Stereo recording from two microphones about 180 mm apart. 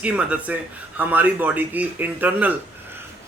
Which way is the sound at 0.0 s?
5° right (ahead or behind).